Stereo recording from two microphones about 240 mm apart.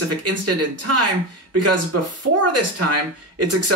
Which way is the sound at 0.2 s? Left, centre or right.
Right.